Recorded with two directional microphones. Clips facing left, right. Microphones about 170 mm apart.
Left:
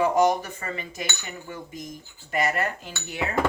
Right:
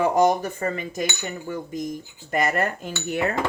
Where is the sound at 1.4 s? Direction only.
45° right (ahead or behind).